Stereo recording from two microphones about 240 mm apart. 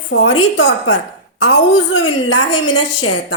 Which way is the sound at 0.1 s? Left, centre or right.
Left.